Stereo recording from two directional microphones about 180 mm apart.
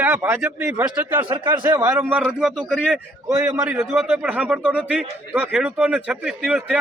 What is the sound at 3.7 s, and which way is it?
A man's voice, centre (ahead or behind).